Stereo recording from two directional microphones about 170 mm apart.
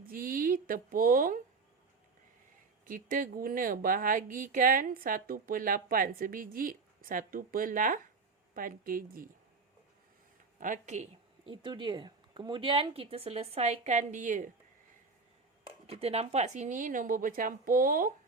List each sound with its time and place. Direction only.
0.0 s a sound: 55° right (ahead or behind)
2.8 s speech: 55° right (ahead or behind)
10.6 s speech: 45° right (ahead or behind)
11.4 s speech: 30° right (ahead or behind); by 14.5 s 50° right (ahead or behind)
15.9 s speech: 35° right (ahead or behind); by 18.1 s 55° right (ahead or behind)